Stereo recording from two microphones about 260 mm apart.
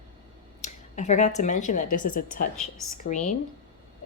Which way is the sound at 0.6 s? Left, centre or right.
Left.